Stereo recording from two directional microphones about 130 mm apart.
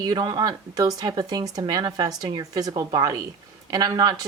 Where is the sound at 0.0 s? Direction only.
30° right (ahead or behind).